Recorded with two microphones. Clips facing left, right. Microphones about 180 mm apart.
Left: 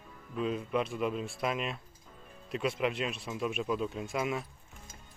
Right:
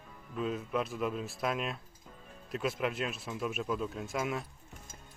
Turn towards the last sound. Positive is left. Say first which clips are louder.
# left 1 dB
turn(degrees=0)  # may be behind; listen again after turning